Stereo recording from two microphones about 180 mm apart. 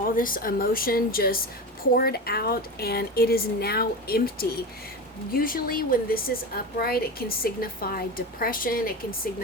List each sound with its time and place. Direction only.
0.2 s a woman's voice: 50° left (ahead or behind)